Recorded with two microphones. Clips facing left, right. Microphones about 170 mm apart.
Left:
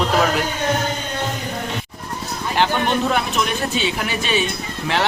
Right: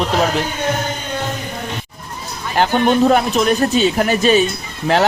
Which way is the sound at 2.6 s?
45° right (ahead or behind).